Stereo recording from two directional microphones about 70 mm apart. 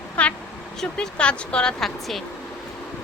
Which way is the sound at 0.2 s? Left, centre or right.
Centre.